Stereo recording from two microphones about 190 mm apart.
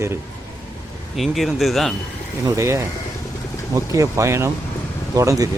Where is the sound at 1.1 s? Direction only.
Centre (ahead or behind).